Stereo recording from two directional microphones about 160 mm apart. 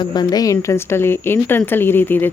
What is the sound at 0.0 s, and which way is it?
A woman's voice, 25° left (ahead or behind).